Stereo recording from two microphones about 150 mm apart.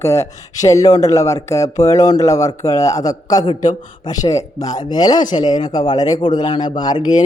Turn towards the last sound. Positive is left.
turn(degrees=25)  # may be behind; listen again after turning